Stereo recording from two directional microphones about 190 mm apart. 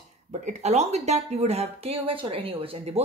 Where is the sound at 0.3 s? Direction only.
35° right (ahead or behind).